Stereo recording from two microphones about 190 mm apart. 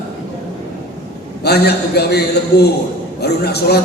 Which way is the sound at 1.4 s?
60° left (ahead or behind).